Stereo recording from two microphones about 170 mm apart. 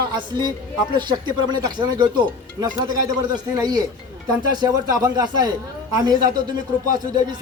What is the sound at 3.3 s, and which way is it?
Speech, 25° right (ahead or behind).